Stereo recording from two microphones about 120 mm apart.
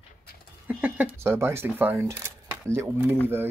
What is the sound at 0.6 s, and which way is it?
Speech, 10° right (ahead or behind).